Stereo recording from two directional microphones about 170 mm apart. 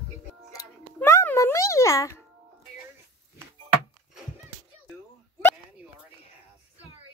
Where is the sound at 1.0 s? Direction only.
15° left (ahead or behind).